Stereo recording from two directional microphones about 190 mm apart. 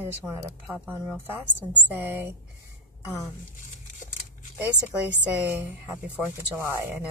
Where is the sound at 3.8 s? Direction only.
45° left (ahead or behind).